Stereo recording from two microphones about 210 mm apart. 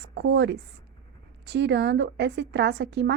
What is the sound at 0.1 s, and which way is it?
A woman's voice, 55° right (ahead or behind).